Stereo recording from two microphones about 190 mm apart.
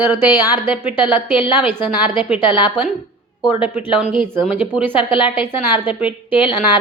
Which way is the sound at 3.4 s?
5° right (ahead or behind).